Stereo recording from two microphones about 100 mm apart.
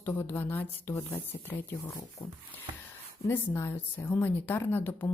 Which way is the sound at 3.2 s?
25° left (ahead or behind).